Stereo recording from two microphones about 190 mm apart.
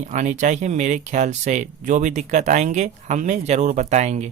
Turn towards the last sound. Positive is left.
turn(degrees=-35)  # may be behind; listen again after turning